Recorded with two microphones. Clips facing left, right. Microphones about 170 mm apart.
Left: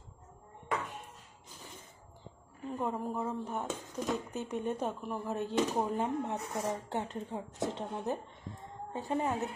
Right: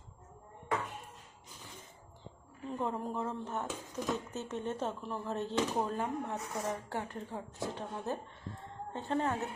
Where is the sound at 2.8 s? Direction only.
5° left (ahead or behind).